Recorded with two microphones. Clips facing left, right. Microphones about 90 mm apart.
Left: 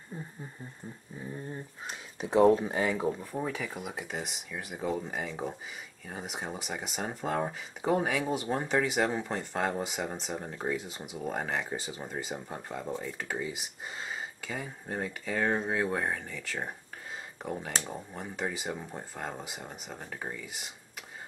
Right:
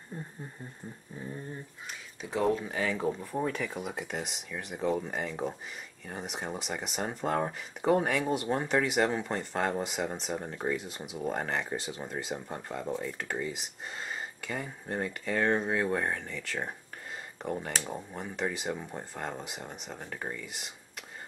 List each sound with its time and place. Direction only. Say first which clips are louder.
0.1 s a sound: even; 5° left (ahead or behind)
1.1 s speech: right 1 dB; 5° left (ahead or behind)
2.2 s speech: left 6 dB; 30° left (ahead or behind)
3.0 s speech: right 1 dB; 5° left (ahead or behind)